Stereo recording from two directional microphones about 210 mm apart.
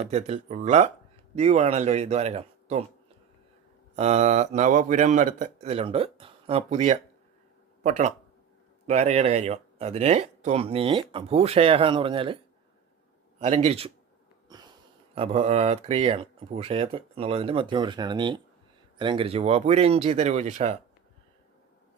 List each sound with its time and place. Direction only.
0.1 s speech: 30° right (ahead or behind)
3.9 s speech: 30° right (ahead or behind)
13.4 s speech: 35° right (ahead or behind)
14.5 s wheeze: 20° right (ahead or behind)
15.1 s speech: 30° right (ahead or behind)